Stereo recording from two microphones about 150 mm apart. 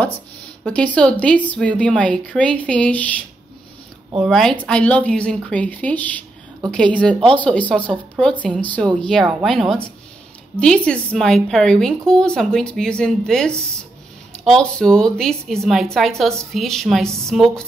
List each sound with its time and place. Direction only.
0.7 s a woman's voice: 10° left (ahead or behind)